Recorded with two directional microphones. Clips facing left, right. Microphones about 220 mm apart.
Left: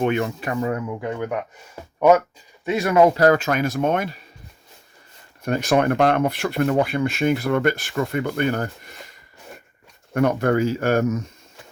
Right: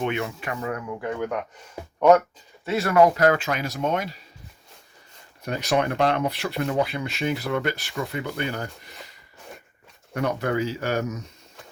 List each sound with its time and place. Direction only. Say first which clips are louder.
0.0 s speech: left 5 dB; 45° left (ahead or behind)
1.0 s speech: left 2 dB; 10° left (ahead or behind)
3.2 s speech: left 4 dB; 40° left (ahead or behind)
5.5 s speech: left 5 dB; 50° left (ahead or behind)
10.2 s speech: left 6 dB; 50° left (ahead or behind)